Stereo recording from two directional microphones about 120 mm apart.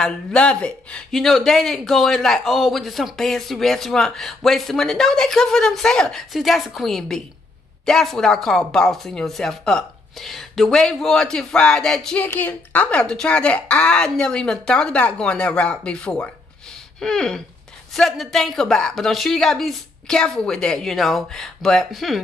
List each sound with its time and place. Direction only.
0.0 s speech: 5° left (ahead or behind)